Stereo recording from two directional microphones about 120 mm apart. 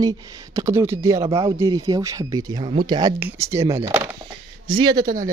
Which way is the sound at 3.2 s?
25° right (ahead or behind).